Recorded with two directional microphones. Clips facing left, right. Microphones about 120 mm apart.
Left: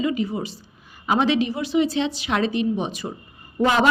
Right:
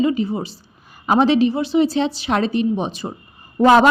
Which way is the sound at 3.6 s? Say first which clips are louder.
Right 7 dB; 40° right (ahead or behind).